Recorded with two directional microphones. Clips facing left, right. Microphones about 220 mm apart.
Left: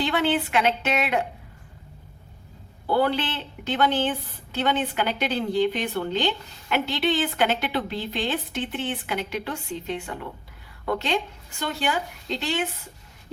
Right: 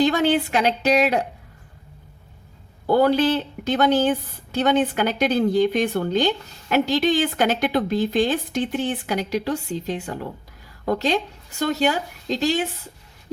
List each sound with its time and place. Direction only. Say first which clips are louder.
0.0 s a woman's voice: right 5 dB; 40° right (ahead or behind)
2.8 s a woman's voice: right 6 dB; 45° right (ahead or behind)